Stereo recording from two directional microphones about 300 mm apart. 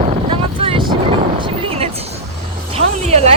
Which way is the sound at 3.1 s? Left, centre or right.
Right.